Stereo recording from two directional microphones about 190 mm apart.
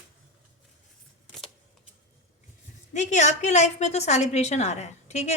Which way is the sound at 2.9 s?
40° left (ahead or behind).